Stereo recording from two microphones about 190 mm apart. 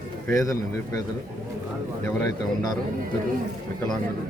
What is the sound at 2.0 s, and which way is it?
Speech, 20° left (ahead or behind).